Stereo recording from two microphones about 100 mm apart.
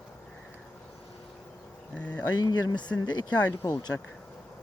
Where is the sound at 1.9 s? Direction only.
15° left (ahead or behind).